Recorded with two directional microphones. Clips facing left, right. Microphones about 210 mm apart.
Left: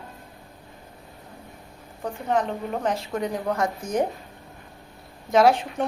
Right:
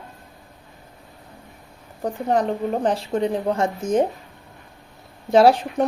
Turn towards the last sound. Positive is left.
turn(degrees=-30)  # may be behind; listen again after turning